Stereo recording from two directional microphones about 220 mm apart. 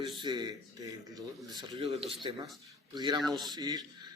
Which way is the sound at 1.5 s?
20° right (ahead or behind).